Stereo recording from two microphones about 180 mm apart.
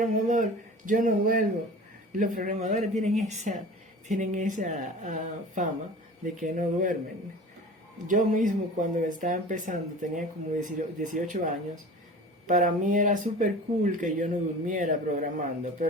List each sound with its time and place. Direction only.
0.0 s speech: 45° right (ahead or behind)
8.0 s speech: 45° right (ahead or behind)